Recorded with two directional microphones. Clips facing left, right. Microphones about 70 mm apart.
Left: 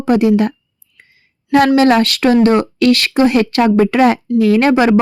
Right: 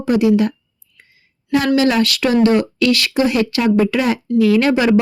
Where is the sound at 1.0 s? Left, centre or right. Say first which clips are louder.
Left 3 dB; left.